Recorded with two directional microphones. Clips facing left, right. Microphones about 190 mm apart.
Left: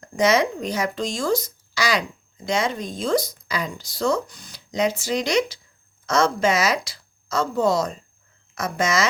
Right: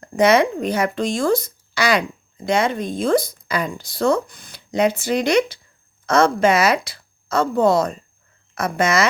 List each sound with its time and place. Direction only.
0.0 s speech: 60° right (ahead or behind)